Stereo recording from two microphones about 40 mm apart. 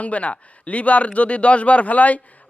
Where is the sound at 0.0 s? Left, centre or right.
Left.